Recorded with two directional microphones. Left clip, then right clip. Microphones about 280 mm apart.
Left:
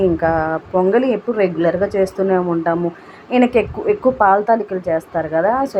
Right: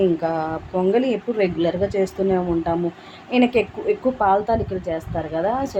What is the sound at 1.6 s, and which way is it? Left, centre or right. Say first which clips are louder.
A woman's voice: left 5 dB; centre.